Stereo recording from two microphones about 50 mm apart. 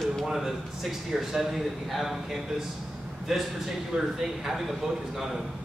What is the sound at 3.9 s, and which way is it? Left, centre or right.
Speech, centre.